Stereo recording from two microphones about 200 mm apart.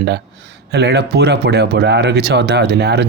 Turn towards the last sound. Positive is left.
turn(degrees=-55)  # may be behind; listen again after turning